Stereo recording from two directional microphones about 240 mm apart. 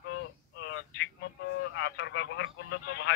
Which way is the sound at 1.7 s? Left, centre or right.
Left.